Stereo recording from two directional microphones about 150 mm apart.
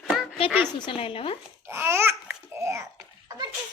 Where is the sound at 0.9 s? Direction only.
35° left (ahead or behind).